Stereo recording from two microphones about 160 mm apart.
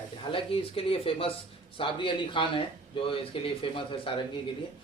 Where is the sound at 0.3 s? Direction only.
35° left (ahead or behind).